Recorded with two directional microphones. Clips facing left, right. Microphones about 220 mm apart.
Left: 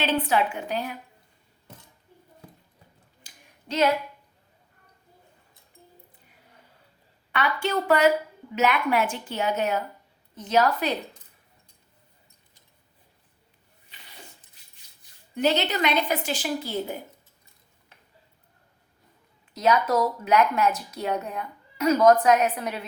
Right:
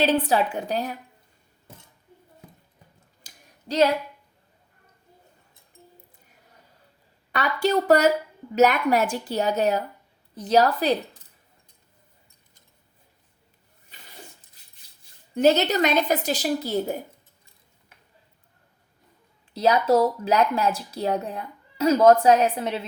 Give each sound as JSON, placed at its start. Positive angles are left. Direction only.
{"t": 0.0, "sound": "a woman's voice", "side_deg": -35}
{"t": 3.2, "sound": "a sound", "side_deg": -35}
{"t": 7.3, "sound": "a woman's voice", "side_deg": -40}
{"t": 15.4, "sound": "a woman's voice", "side_deg": -45}
{"t": 19.5, "sound": "speech", "side_deg": -30}